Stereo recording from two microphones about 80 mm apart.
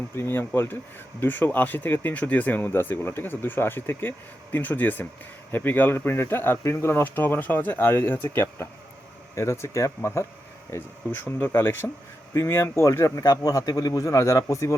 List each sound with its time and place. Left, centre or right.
0.2 s a man's voice: left
10.7 s a man's voice: left